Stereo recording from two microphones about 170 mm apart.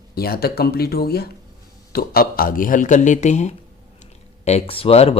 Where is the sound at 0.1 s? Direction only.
65° left (ahead or behind).